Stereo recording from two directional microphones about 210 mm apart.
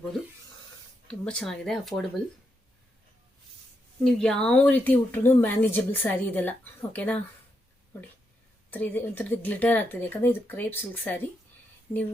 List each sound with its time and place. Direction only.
1.0 s speech: 5° left (ahead or behind)
4.0 s speech: 5° left (ahead or behind)
8.7 s speech: 10° left (ahead or behind)